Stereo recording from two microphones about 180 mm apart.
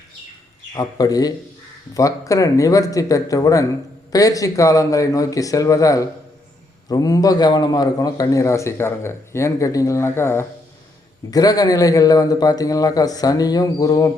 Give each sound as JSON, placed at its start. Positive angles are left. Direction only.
{"t": 0.7, "sound": "a man's voice", "side_deg": 20}